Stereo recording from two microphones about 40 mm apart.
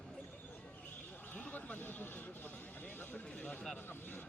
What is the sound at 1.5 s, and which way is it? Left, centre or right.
Speech, left.